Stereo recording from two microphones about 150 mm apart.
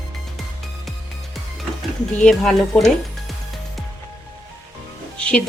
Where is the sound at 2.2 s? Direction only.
Centre (ahead or behind).